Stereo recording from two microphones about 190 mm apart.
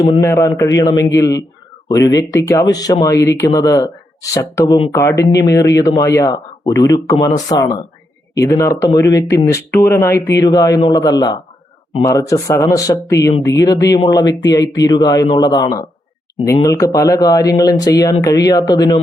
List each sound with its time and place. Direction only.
0.2 s speech: 15° left (ahead or behind)